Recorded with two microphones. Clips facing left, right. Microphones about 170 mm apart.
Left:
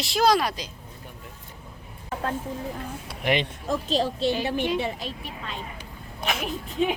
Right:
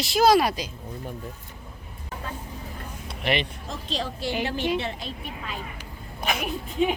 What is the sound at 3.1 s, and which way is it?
Speech, 15° left (ahead or behind).